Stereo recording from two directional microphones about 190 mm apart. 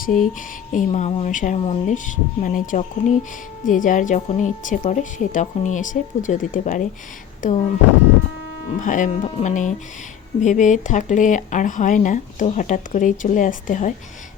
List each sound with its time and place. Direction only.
0.0 s speech: 45° left (ahead or behind)
7.4 s a sound: 45° left (ahead or behind)
8.8 s speech: 40° left (ahead or behind)